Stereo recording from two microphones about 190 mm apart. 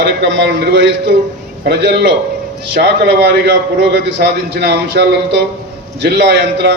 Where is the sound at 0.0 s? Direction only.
65° right (ahead or behind).